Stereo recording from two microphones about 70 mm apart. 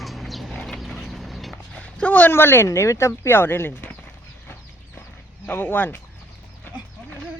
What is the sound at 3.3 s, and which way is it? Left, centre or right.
Speech, left.